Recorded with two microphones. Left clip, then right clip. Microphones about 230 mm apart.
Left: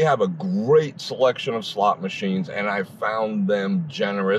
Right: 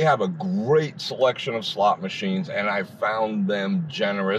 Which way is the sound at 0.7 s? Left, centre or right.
Left.